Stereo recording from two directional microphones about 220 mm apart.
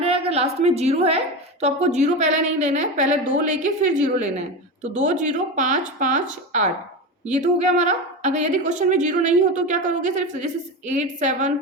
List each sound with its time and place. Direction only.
0.0 s a woman's voice: 25° right (ahead or behind)